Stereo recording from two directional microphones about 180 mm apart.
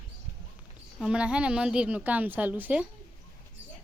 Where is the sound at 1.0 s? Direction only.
5° right (ahead or behind).